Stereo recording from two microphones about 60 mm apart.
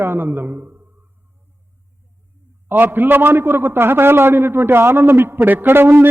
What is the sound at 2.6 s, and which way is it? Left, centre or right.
A man's voice, right.